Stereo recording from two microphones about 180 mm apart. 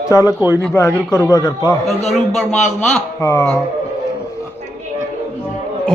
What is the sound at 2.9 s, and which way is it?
Speech, 15° left (ahead or behind).